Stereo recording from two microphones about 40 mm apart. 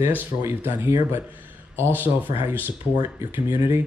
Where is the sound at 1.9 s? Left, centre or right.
Right.